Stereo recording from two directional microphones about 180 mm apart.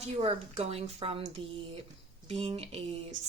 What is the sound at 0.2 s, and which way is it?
Speech, 35° right (ahead or behind).